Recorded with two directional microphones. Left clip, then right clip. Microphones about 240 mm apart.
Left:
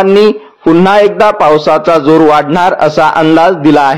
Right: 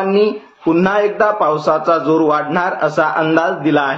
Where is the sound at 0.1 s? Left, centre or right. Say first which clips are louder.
Left 8 dB; left.